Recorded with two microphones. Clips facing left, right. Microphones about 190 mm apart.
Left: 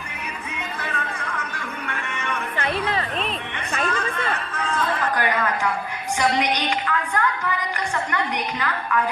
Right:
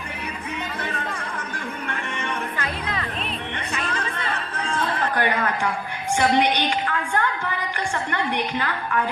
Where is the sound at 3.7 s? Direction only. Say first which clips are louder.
Left 5 dB; 55° left (ahead or behind).